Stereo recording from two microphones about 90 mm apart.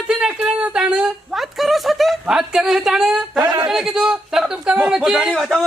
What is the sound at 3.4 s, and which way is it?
Speech, 45° right (ahead or behind).